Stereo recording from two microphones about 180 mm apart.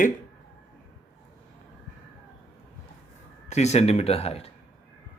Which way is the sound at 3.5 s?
40° left (ahead or behind).